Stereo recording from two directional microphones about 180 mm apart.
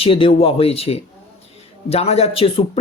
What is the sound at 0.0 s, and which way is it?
A man's voice, 30° left (ahead or behind).